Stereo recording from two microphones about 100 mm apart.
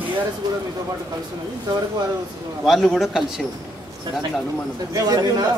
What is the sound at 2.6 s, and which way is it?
Speech, centre (ahead or behind).